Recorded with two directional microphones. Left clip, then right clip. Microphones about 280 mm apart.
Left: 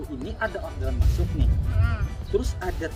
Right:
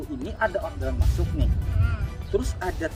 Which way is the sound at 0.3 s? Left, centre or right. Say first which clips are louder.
Right 4 dB; centre.